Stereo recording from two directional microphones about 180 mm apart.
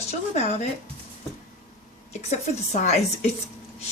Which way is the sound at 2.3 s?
40° left (ahead or behind).